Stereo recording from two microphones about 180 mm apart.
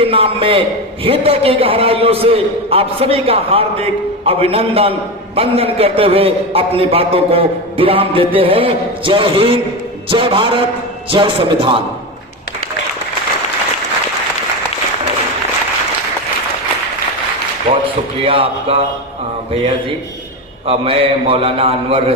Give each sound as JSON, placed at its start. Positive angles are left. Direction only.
{"t": 0.0, "sound": "a man's voice", "side_deg": -30}
{"t": 17.7, "sound": "a sound", "side_deg": -35}
{"t": 18.3, "sound": "a man's voice", "side_deg": -30}
{"t": 20.7, "sound": "a man's voice", "side_deg": -30}